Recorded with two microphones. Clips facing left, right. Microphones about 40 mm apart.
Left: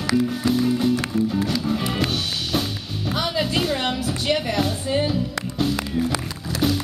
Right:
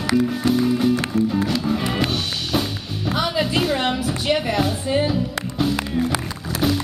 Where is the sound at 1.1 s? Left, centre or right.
Centre.